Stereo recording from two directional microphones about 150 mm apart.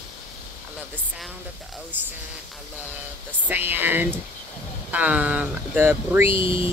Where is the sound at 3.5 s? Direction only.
15° right (ahead or behind).